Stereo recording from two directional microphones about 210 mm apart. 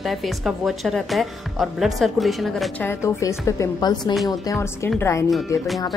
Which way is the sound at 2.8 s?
15° left (ahead or behind).